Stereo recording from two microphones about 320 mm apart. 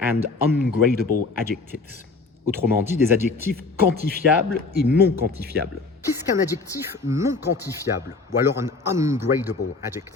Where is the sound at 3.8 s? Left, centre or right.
Right.